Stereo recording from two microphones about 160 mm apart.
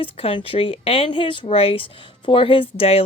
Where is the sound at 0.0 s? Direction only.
35° left (ahead or behind).